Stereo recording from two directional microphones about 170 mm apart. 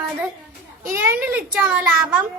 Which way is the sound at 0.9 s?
15° right (ahead or behind).